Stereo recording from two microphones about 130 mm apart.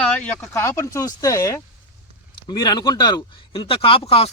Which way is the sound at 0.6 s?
20° left (ahead or behind).